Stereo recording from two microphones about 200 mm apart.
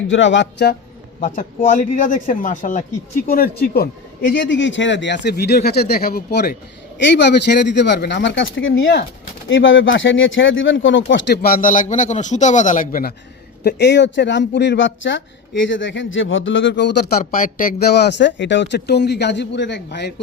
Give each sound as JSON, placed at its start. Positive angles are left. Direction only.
{"t": 0.1, "sound": "speech", "side_deg": 65}
{"t": 1.2, "sound": "a man's voice", "side_deg": 40}
{"t": 4.3, "sound": "speech", "side_deg": 65}
{"t": 13.7, "sound": "speech", "side_deg": 60}